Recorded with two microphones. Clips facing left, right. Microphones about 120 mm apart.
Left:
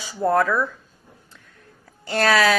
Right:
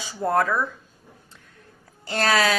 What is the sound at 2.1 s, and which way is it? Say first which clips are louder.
Speech: left 3 dB; 25° right (ahead or behind).